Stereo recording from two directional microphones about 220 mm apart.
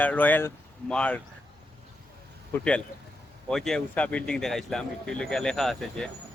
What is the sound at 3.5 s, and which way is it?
Speech, centre (ahead or behind).